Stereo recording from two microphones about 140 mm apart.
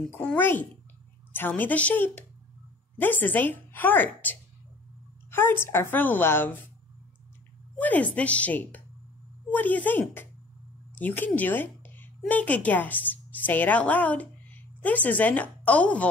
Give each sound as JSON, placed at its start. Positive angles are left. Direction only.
{"t": 0.1, "sound": "a woman's voice", "side_deg": 15}
{"t": 7.8, "sound": "a woman's voice", "side_deg": 10}